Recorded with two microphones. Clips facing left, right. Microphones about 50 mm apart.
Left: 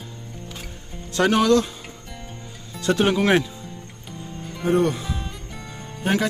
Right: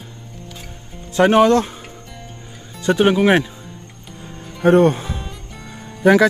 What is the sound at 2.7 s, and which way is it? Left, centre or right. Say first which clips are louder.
Speech: right 5 dB; centre.